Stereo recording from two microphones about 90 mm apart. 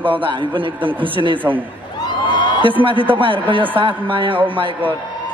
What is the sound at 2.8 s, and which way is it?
Speech, 70° right (ahead or behind).